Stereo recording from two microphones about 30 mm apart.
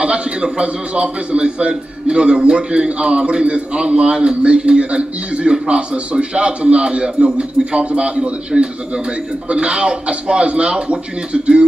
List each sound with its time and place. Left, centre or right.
0.0 s a man's voice: right